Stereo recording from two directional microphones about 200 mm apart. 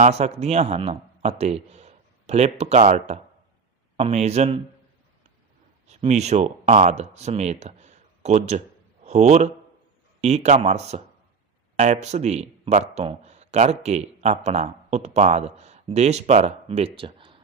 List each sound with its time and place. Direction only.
0.0 s speech: 35° right (ahead or behind)
5.9 s a man's voice: 35° right (ahead or behind)